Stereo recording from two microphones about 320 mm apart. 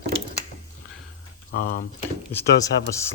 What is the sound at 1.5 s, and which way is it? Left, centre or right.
Speech, left.